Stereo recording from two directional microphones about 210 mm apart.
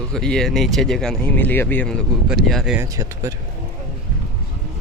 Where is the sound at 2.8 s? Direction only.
15° right (ahead or behind).